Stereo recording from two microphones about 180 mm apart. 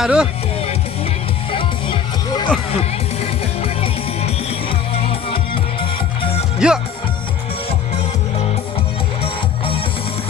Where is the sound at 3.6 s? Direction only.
35° left (ahead or behind).